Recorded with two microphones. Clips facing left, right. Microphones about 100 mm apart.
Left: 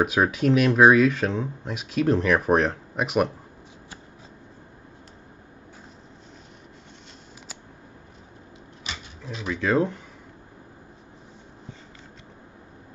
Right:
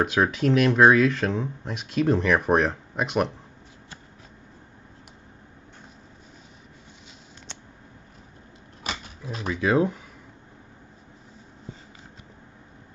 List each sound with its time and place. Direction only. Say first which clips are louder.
0.0 s speech: left 1 dB; 5° left (ahead or behind)
8.8 s a sound: right 4 dB; 45° right (ahead or behind)
9.5 s speech: right 1 dB; 10° right (ahead or behind)